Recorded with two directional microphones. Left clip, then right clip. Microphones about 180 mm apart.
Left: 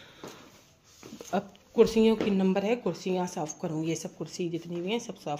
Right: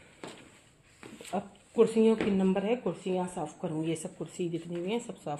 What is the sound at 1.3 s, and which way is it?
Speech, 30° left (ahead or behind).